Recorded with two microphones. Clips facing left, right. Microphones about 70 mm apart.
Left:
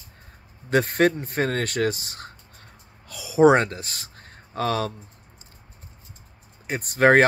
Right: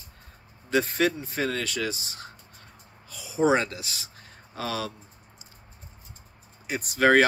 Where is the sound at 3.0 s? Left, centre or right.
Left.